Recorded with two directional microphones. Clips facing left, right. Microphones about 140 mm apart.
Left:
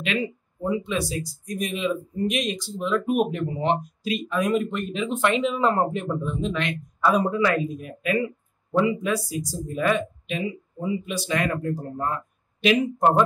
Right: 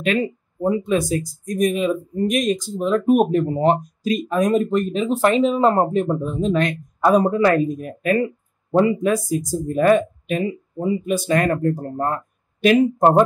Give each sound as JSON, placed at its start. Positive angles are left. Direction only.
{"t": 0.0, "sound": "speech", "side_deg": -45}